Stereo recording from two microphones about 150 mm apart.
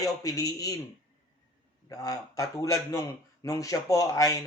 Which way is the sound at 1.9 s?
25° left (ahead or behind).